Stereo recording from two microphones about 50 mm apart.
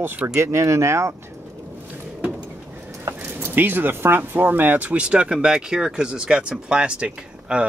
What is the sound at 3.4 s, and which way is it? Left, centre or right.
Speech, right.